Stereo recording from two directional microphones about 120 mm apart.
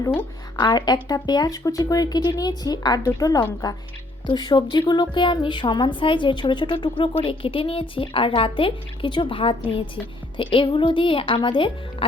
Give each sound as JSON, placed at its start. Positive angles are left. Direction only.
{"t": 0.0, "sound": "a woman's voice", "side_deg": 20}
{"t": 0.5, "sound": "a woman's voice", "side_deg": 35}